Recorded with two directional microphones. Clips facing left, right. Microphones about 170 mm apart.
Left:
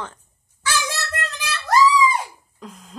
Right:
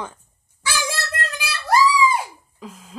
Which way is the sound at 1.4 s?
10° right (ahead or behind).